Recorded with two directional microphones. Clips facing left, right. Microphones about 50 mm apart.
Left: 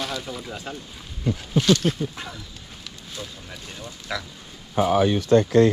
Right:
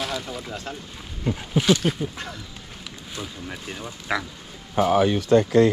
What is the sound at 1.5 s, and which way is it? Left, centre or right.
Speech, centre.